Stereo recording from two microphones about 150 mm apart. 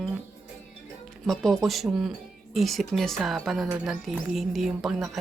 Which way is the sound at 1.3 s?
Centre (ahead or behind).